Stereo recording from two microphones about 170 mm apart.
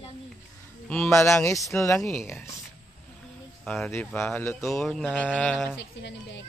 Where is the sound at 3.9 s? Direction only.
5° left (ahead or behind).